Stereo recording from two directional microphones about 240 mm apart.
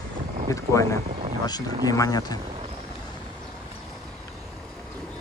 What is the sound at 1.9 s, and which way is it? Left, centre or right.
Speech, centre.